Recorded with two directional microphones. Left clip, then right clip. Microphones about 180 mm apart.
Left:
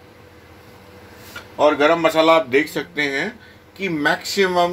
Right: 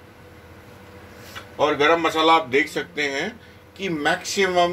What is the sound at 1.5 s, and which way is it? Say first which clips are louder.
Speech: left 3 dB; 55° left (ahead or behind).